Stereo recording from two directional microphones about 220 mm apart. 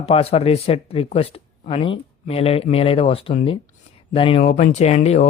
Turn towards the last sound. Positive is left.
turn(degrees=30)  # may be behind; listen again after turning